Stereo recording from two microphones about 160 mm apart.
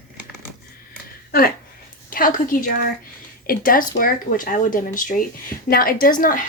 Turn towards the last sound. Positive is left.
turn(degrees=60)  # may be behind; listen again after turning